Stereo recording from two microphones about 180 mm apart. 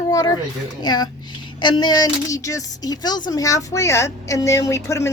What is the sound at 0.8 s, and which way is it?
A woman's voice, 20° left (ahead or behind).